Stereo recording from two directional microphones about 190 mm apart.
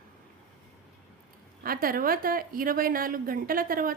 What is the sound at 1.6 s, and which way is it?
A woman's voice, 50° right (ahead or behind).